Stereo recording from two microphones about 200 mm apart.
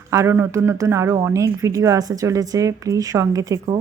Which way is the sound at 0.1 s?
15° right (ahead or behind).